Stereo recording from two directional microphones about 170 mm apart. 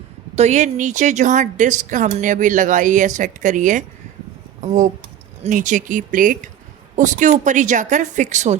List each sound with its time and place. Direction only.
0.3 s a woman's voice: 40° right (ahead or behind)